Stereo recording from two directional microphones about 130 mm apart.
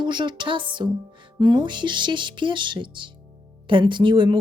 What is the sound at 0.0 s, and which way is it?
Speech, 35° right (ahead or behind).